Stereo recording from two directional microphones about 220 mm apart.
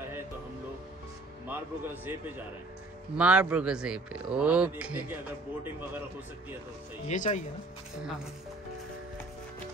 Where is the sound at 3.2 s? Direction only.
5° right (ahead or behind).